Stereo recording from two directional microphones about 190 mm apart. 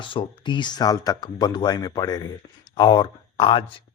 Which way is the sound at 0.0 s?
25° left (ahead or behind).